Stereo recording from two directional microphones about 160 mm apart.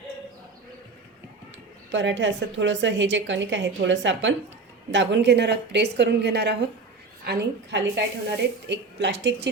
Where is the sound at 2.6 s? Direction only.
90° right.